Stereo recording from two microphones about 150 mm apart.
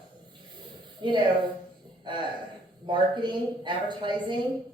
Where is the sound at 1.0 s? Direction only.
30° right (ahead or behind).